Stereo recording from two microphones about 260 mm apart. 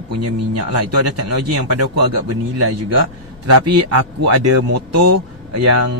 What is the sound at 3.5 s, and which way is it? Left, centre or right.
Speech, right.